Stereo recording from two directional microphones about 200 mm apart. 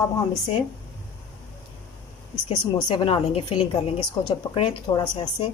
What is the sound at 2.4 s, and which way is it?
A woman's voice, 25° left (ahead or behind).